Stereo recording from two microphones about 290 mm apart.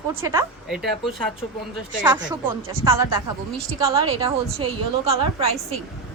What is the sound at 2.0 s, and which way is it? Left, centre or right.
A woman's voice, centre.